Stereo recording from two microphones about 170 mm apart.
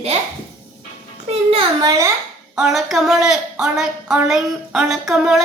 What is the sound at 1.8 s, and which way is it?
Speech, 20° right (ahead or behind).